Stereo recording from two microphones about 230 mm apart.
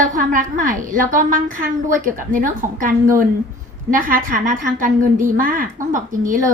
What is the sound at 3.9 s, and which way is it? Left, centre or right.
A woman's voice, right.